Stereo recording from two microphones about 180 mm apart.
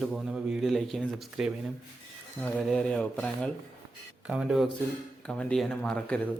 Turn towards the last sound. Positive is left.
turn(degrees=5)  # may be behind; listen again after turning